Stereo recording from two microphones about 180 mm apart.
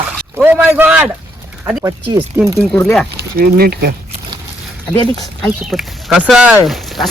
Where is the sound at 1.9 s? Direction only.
20° right (ahead or behind).